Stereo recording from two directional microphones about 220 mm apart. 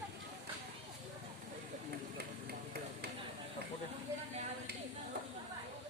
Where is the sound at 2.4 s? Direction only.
45° right (ahead or behind).